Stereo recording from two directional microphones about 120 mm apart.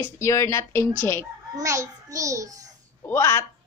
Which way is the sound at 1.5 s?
25° right (ahead or behind).